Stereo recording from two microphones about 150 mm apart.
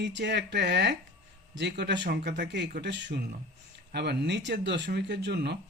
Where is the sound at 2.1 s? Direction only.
90° right.